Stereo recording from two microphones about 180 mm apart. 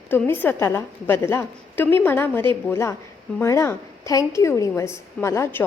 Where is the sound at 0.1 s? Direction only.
10° left (ahead or behind).